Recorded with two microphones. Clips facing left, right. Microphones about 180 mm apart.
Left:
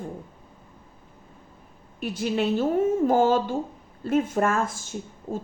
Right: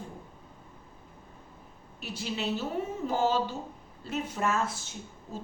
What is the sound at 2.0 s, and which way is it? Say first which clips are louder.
Speech: left 9 dB; 50° left (ahead or behind).